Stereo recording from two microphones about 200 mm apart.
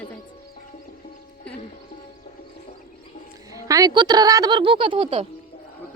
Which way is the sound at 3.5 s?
15° right (ahead or behind).